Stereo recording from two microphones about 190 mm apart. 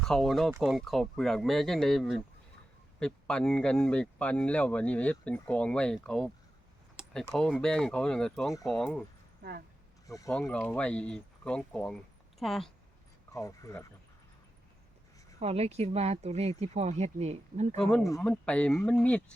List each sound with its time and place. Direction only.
0.0 s speech: 5° left (ahead or behind)
10.1 s speech: 15° left (ahead or behind)
10.3 s speech: 5° left (ahead or behind)
13.3 s speech: 15° left (ahead or behind)
15.4 s speech: 35° right (ahead or behind)
17.7 s speech: centre (ahead or behind)